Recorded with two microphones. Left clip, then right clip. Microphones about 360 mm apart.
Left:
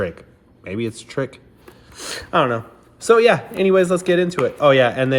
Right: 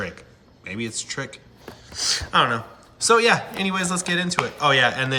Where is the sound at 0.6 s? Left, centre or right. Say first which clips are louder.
Left 4 dB; centre.